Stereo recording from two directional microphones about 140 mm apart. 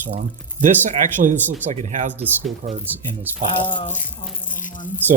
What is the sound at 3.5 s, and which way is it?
Speech, 35° left (ahead or behind).